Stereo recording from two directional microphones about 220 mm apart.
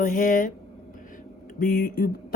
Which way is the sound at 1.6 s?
40° left (ahead or behind).